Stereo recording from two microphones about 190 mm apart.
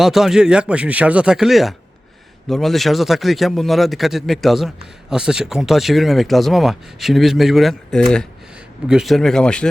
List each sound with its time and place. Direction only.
0.0 s a man's voice: centre (ahead or behind)